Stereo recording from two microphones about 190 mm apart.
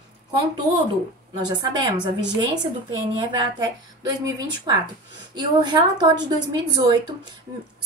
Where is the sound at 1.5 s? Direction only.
20° right (ahead or behind).